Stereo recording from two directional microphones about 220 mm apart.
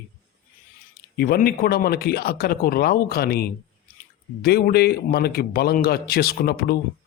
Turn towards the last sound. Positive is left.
turn(degrees=45)  # may be behind; listen again after turning